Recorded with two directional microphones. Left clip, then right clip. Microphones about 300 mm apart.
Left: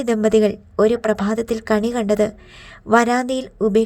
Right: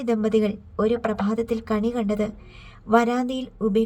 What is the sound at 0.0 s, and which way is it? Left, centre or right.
A woman's voice, left.